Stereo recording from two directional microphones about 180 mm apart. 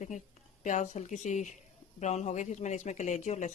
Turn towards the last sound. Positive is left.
turn(degrees=40)  # may be behind; listen again after turning